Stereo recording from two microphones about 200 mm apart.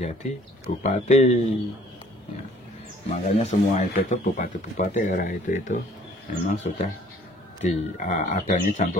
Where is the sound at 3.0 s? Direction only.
35° left (ahead or behind).